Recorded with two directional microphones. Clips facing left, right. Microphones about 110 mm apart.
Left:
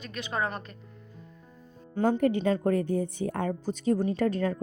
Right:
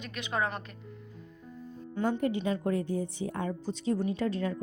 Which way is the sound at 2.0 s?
50° left (ahead or behind).